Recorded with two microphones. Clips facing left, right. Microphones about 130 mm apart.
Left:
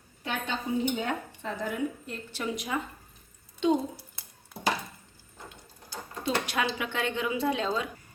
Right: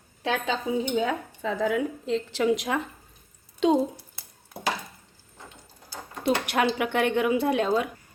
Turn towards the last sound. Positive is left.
turn(degrees=-55)  # may be behind; listen again after turning